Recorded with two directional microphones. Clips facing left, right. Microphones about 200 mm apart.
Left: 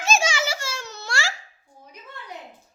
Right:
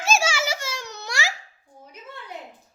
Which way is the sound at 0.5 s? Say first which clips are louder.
Right 1 dB; 15° right (ahead or behind).